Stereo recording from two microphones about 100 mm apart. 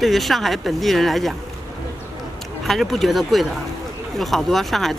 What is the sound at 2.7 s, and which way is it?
Speech, centre (ahead or behind).